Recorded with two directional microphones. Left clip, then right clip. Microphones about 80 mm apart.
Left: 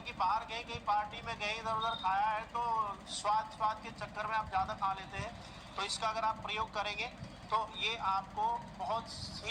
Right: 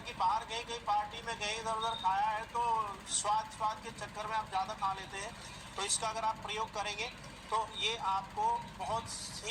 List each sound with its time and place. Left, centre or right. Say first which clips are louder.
0.2 s speech: right 1 dB; left